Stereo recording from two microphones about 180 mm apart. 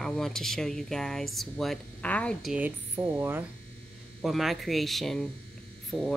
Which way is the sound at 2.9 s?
10° right (ahead or behind).